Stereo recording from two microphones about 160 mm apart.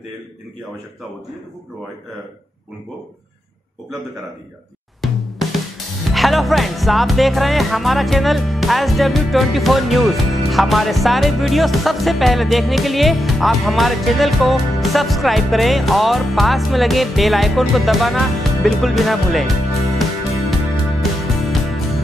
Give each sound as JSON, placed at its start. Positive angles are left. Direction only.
{"t": 5.0, "sound": "music", "side_deg": 0}
{"t": 6.1, "sound": "speech", "side_deg": 0}
{"t": 20.0, "sound": "music", "side_deg": 0}